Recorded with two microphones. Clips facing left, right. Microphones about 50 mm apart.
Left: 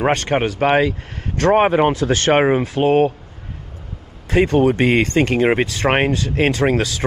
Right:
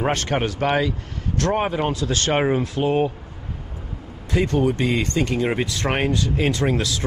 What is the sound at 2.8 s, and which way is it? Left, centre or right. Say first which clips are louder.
Speech: left 6 dB; left.